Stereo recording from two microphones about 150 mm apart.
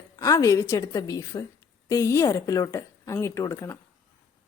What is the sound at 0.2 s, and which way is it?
Speech, 20° left (ahead or behind).